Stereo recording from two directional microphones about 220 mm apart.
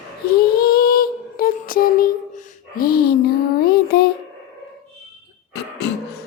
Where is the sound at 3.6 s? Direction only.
45° left (ahead or behind).